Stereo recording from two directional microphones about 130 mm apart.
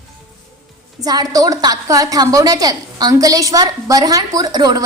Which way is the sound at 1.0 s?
30° right (ahead or behind).